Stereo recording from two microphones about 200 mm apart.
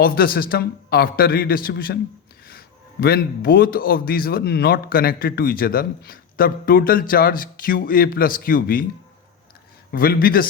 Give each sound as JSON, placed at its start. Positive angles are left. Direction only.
{"t": 0.0, "sound": "a man's voice", "side_deg": 50}
{"t": 9.9, "sound": "a man's voice", "side_deg": 45}